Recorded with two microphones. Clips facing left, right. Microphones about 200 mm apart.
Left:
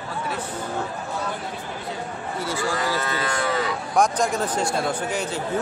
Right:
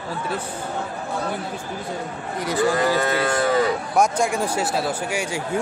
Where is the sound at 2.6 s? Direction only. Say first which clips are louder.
Right 7 dB; 20° right (ahead or behind).